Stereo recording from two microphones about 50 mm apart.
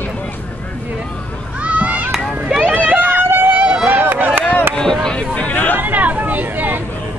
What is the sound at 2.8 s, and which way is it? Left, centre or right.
Run, right.